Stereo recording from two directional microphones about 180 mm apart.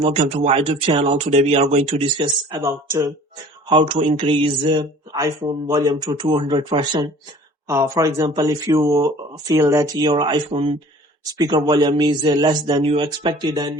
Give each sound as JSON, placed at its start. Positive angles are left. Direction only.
{"t": 0.0, "sound": "speech", "side_deg": -35}
{"t": 7.7, "sound": "speech", "side_deg": -15}